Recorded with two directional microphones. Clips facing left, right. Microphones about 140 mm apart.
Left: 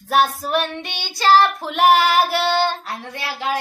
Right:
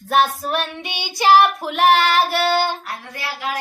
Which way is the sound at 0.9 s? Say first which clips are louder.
Right 1 dB; 15° right (ahead or behind).